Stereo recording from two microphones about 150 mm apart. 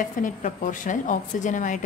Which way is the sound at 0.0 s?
60° left (ahead or behind).